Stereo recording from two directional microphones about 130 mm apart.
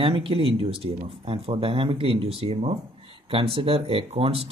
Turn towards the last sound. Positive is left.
turn(degrees=-50)  # may be behind; listen again after turning